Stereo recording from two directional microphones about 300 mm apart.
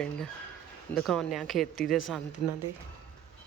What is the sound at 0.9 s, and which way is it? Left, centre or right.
A child's voice, centre.